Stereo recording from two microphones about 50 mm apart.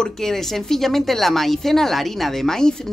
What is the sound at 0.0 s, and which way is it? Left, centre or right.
Speech, centre.